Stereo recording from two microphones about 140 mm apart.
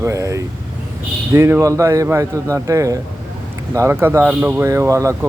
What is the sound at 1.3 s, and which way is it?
A man's voice, 20° right (ahead or behind).